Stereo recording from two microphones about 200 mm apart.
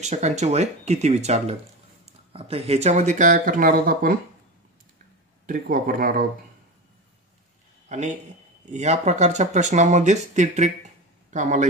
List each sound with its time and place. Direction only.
0.0 s speech: 35° right (ahead or behind)
5.5 s speech: 45° right (ahead or behind)
7.9 s speech: 35° right (ahead or behind)